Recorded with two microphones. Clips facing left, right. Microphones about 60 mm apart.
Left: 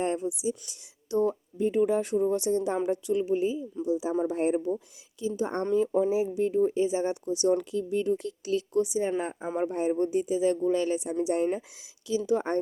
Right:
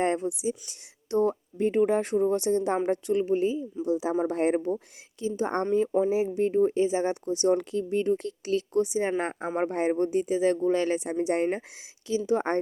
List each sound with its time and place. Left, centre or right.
0.0 s speech: right
5.2 s speech: right